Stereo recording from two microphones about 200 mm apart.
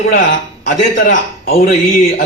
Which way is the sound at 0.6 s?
40° left (ahead or behind).